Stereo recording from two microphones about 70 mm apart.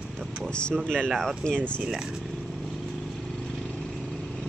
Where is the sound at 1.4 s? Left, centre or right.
Centre.